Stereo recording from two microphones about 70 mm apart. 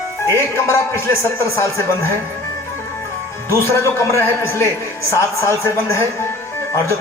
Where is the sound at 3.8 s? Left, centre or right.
Left.